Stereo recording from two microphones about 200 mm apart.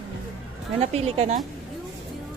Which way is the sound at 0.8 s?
30° right (ahead or behind).